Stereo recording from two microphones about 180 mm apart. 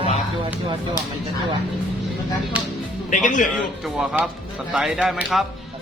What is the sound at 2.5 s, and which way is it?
Speech, 10° right (ahead or behind).